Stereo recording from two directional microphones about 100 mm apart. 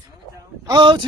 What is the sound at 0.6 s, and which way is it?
Speech, 50° right (ahead or behind).